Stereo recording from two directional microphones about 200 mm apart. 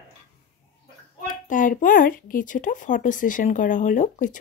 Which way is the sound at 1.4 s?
40° left (ahead or behind).